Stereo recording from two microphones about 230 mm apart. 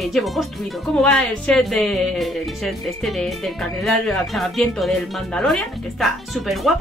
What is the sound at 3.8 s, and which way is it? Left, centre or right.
A woman's voice, centre.